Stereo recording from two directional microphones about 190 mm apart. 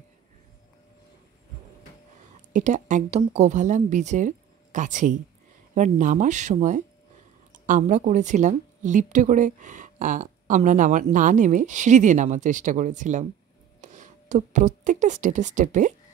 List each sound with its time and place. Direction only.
2.5 s a woman's voice: 40° right (ahead or behind)